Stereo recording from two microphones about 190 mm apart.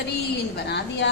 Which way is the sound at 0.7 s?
65° left (ahead or behind).